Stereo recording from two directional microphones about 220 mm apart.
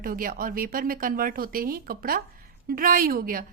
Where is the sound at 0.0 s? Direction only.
40° right (ahead or behind).